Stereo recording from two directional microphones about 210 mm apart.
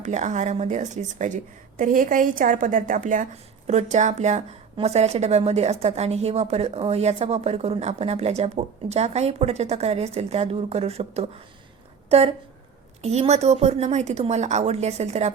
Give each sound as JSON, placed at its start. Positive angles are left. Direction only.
{"t": 0.0, "sound": "a woman's voice", "side_deg": -35}